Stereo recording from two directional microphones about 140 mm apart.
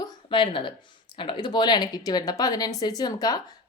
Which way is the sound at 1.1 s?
35° left (ahead or behind).